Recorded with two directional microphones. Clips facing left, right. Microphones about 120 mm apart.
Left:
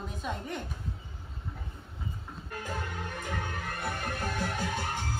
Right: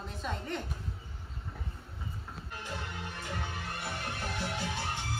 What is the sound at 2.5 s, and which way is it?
Music, 45° left (ahead or behind).